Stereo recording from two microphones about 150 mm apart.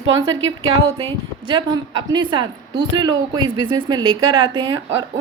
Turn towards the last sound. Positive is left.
turn(degrees=-25)  # may be behind; listen again after turning